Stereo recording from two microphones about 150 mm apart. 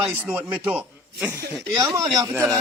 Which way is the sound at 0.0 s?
10° right (ahead or behind).